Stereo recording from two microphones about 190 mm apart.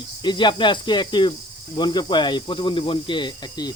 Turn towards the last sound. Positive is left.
turn(degrees=20)  # may be behind; listen again after turning